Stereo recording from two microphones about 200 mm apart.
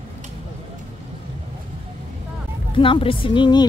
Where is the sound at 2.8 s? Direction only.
25° left (ahead or behind).